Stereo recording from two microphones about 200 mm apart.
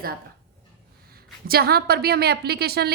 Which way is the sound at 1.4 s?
50° right (ahead or behind).